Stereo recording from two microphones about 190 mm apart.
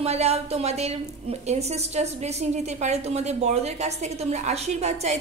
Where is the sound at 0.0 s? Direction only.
35° right (ahead or behind).